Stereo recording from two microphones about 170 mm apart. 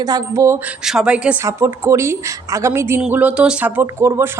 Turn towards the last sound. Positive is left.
turn(degrees=-15)  # may be behind; listen again after turning